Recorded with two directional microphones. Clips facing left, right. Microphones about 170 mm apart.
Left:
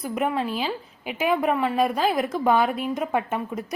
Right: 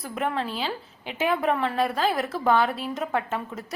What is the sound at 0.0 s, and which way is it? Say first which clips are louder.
A woman's voice: left 3 dB; 15° left (ahead or behind).